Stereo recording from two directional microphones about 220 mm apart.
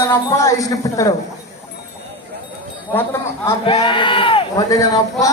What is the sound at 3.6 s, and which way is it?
Speech, 25° left (ahead or behind).